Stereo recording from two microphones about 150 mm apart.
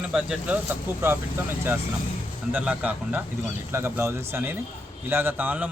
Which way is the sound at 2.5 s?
10° right (ahead or behind).